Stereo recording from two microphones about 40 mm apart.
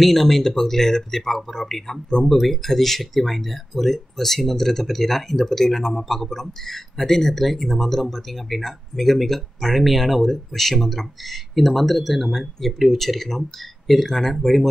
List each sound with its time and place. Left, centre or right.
0.0 s speech: centre